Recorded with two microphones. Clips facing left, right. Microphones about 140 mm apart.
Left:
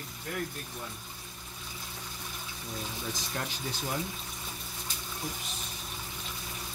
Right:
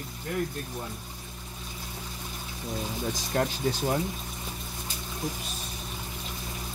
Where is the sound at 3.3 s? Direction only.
45° right (ahead or behind).